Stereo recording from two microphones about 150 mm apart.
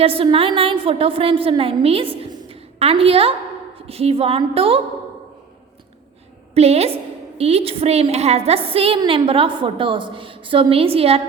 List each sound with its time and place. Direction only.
0.0 s a woman's voice: 40° right (ahead or behind)
6.5 s a woman's voice: 45° right (ahead or behind)